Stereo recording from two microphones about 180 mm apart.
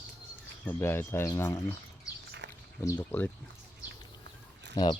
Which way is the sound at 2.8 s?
15° left (ahead or behind).